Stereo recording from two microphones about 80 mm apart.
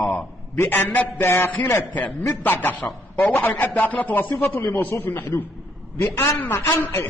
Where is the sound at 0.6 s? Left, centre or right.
Left.